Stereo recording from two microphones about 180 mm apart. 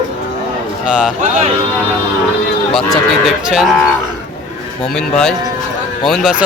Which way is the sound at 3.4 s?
5° right (ahead or behind).